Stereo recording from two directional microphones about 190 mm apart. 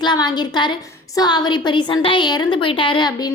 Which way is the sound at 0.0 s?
25° left (ahead or behind).